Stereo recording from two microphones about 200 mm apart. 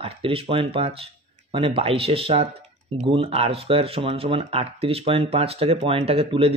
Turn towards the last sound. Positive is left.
turn(degrees=-30)  # may be behind; listen again after turning